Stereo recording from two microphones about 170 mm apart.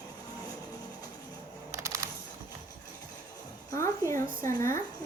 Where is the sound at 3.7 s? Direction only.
15° left (ahead or behind).